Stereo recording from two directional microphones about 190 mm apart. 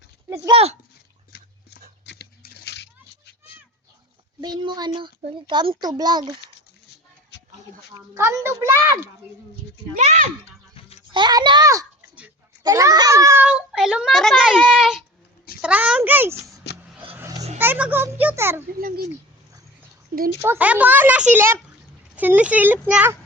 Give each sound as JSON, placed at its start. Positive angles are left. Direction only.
{"t": 0.5, "sound": "a child's voice", "side_deg": -30}
{"t": 2.0, "sound": "a sound", "side_deg": 60}
{"t": 4.4, "sound": "speech", "side_deg": -20}
{"t": 6.8, "sound": "a sound", "side_deg": 65}
{"t": 7.9, "sound": "speech", "side_deg": -15}
{"t": 9.9, "sound": "a child's voice", "side_deg": -40}
{"t": 11.1, "sound": "a child's voice", "side_deg": -20}
{"t": 16.7, "sound": "vehicle", "side_deg": 65}
{"t": 17.2, "sound": "a sound", "side_deg": -15}
{"t": 17.6, "sound": "speech", "side_deg": -10}
{"t": 18.8, "sound": "speech", "side_deg": -50}
{"t": 20.4, "sound": "a child's voice", "side_deg": -10}